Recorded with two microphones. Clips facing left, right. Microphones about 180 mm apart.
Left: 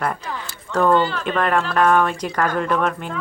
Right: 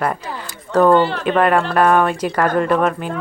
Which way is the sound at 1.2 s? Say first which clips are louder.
Right 5 dB; 10° right (ahead or behind).